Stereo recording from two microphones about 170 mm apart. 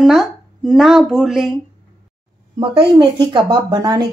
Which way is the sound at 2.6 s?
30° right (ahead or behind).